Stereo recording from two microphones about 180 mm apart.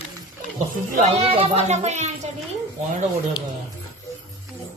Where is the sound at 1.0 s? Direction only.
35° right (ahead or behind).